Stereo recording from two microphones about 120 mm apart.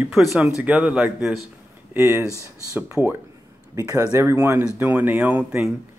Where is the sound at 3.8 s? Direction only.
30° right (ahead or behind); by 5.6 s 10° right (ahead or behind).